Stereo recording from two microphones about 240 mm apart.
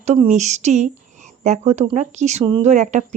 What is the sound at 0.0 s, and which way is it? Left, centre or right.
Speech, right.